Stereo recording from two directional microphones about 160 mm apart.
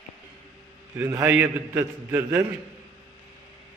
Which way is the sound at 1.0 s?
15° right (ahead or behind).